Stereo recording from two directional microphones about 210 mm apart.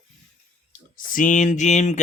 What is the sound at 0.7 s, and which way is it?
Speech, 40° left (ahead or behind).